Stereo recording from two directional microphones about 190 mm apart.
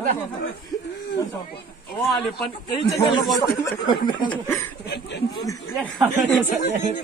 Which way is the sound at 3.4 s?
25° left (ahead or behind).